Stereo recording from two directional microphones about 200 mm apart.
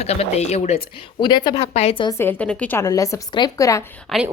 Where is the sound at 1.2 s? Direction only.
20° left (ahead or behind).